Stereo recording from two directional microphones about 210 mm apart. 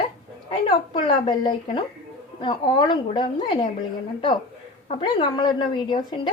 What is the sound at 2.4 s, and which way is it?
A woman's voice, 20° left (ahead or behind).